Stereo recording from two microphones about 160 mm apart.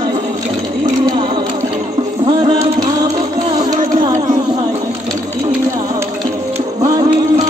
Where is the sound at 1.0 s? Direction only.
30° right (ahead or behind).